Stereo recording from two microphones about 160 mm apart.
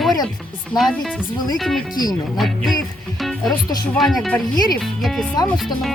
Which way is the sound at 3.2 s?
Centre (ahead or behind).